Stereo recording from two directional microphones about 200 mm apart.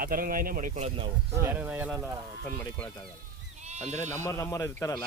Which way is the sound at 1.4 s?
10° right (ahead or behind).